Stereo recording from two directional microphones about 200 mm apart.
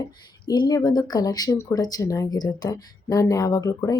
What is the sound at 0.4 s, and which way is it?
Speech, 20° left (ahead or behind).